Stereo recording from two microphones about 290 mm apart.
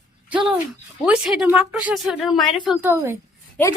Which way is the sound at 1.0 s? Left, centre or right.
Centre.